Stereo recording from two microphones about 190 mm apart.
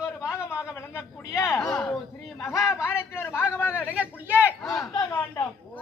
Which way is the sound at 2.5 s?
5° right (ahead or behind).